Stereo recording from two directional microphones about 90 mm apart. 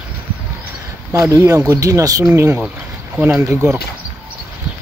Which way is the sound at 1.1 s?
35° right (ahead or behind).